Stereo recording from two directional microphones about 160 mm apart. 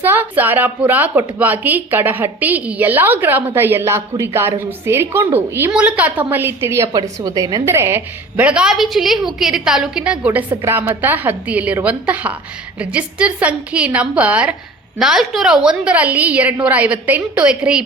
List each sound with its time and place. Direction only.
0.0 s a woman's voice: 10° right (ahead or behind)